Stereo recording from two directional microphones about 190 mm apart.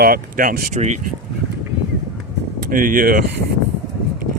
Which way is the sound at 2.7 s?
45° right (ahead or behind).